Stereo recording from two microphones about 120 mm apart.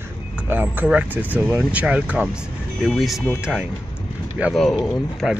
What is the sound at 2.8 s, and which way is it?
Speech, centre (ahead or behind).